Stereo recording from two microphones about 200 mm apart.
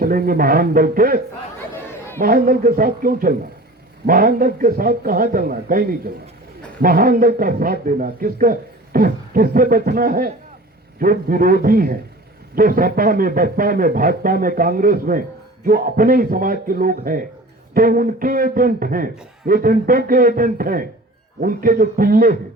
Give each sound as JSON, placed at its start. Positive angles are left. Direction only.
{"t": 0.0, "sound": "a man's voice", "side_deg": -45}
{"t": 1.7, "sound": "chatter", "side_deg": 10}
{"t": 2.1, "sound": "a man's voice", "side_deg": -45}